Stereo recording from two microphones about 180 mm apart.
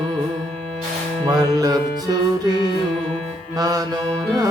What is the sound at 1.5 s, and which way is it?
Music, 20° right (ahead or behind).